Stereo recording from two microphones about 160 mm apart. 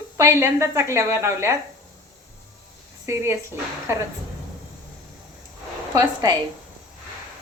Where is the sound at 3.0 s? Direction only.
15° right (ahead or behind).